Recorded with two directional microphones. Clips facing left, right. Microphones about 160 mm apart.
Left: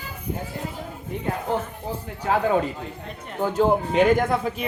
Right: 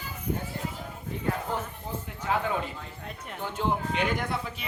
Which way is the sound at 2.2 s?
40° left (ahead or behind).